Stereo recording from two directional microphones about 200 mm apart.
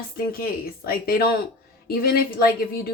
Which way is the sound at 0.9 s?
50° left (ahead or behind).